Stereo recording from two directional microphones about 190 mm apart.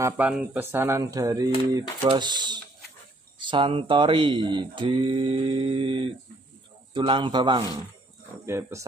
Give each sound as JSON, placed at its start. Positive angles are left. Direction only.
{"t": 0.0, "sound": "speech", "side_deg": -10}